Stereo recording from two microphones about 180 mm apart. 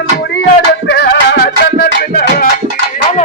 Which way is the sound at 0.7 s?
70° left (ahead or behind).